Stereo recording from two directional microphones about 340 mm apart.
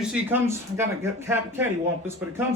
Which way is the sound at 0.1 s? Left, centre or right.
Centre.